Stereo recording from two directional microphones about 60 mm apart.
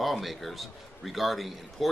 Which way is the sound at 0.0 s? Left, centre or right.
Centre.